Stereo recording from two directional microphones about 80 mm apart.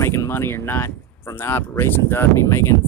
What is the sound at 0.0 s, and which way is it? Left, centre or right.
Speech, left.